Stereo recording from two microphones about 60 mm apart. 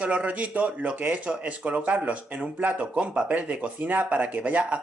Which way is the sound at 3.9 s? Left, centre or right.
Right.